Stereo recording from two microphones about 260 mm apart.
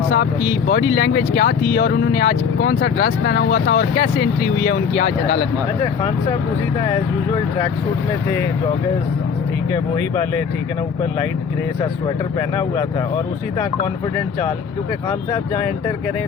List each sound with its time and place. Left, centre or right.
0.7 s speech: left